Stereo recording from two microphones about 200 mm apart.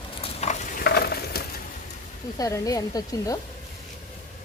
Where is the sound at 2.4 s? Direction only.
15° left (ahead or behind).